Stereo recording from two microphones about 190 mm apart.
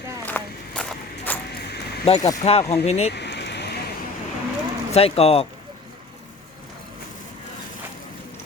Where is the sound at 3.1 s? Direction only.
65° left (ahead or behind).